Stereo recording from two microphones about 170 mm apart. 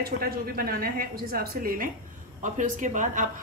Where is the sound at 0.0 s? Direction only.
60° right (ahead or behind).